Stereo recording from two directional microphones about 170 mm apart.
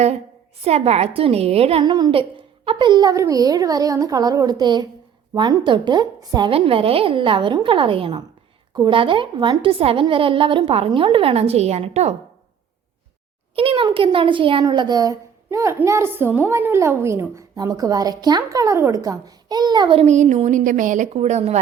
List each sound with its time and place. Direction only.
0.6 s a child's voice: 40° right (ahead or behind)
13.6 s a child's voice: 30° right (ahead or behind)